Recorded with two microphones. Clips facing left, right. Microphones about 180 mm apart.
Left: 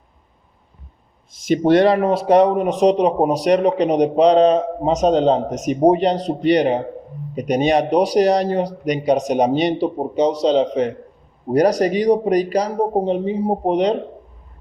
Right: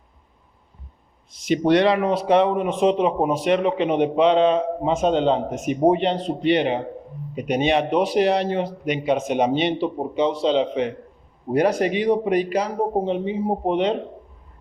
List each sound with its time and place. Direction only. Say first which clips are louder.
1.5 s a man's voice: left 3 dB; 45° left (ahead or behind)